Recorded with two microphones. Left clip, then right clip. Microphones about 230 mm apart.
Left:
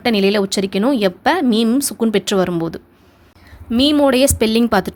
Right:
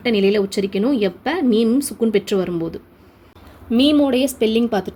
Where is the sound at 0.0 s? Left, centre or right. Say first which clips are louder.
Left 1 dB; left.